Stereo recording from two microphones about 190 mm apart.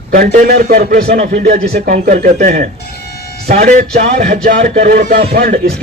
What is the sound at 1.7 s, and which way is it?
A man's voice, 55° right (ahead or behind).